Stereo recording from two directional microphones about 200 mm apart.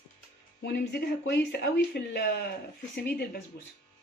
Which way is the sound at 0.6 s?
60° left (ahead or behind).